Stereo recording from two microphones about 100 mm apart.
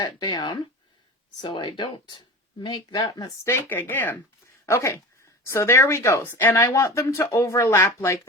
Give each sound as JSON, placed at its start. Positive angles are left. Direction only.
{"t": 0.0, "sound": "speech", "side_deg": 45}
{"t": 3.5, "sound": "speech", "side_deg": 20}
{"t": 6.6, "sound": "speech", "side_deg": 35}